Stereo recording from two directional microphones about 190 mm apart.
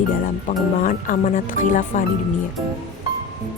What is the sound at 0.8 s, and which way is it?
Speech, 45° left (ahead or behind).